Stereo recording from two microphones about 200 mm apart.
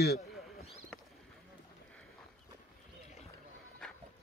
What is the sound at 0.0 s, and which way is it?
Speech, 55° left (ahead or behind).